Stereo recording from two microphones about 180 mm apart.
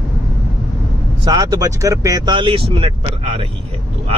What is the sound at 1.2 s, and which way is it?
Speech, 20° right (ahead or behind).